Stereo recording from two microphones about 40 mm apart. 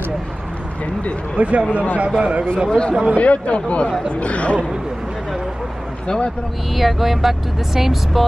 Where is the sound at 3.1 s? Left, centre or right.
Left.